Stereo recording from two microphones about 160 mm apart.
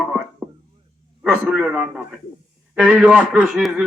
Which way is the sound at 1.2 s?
10° right (ahead or behind).